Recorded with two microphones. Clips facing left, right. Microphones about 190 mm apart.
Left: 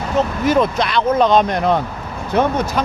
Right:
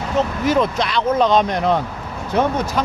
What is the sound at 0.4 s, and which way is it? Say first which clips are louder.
Speech: left 3 dB; 50° left (ahead or behind).